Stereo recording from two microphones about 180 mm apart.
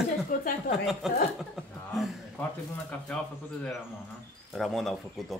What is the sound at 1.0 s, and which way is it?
Speech, centre (ahead or behind).